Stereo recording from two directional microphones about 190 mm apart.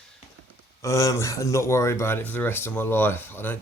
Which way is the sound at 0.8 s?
15° left (ahead or behind).